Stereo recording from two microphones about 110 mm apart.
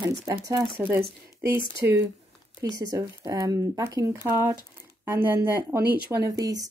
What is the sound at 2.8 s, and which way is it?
Speech, 35° right (ahead or behind).